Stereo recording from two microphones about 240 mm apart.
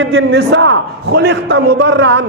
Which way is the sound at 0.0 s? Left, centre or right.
Right.